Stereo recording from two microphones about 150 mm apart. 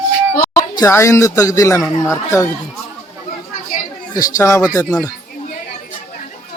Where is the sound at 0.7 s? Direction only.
20° left (ahead or behind).